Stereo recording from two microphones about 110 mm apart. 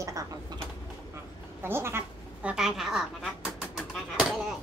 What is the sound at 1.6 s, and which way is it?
Speech, 20° right (ahead or behind).